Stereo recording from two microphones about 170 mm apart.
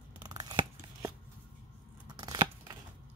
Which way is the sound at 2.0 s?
25° right (ahead or behind).